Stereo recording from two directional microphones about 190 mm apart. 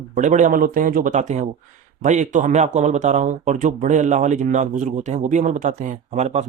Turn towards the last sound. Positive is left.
turn(degrees=-35)  # may be behind; listen again after turning